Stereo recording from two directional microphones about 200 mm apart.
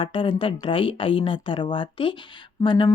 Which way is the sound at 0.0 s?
25° left (ahead or behind).